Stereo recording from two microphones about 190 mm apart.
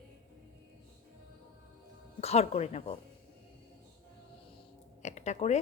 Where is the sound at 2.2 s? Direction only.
35° left (ahead or behind).